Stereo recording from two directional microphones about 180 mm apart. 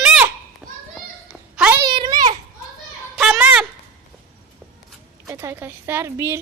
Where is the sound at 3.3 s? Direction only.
10° right (ahead or behind).